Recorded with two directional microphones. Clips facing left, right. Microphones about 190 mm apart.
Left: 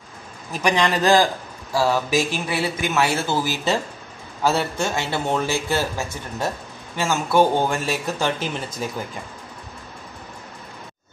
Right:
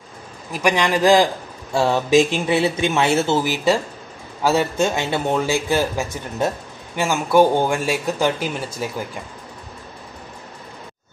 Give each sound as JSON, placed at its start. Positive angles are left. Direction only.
{"t": 0.5, "sound": "a man's voice", "side_deg": -10}